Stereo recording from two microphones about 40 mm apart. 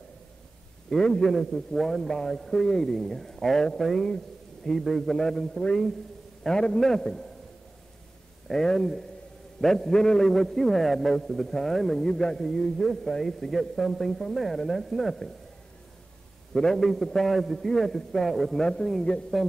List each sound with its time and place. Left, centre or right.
0.8 s a man's voice: centre
8.5 s a man's voice: centre
16.5 s a man's voice: centre
18.6 s a man's voice: left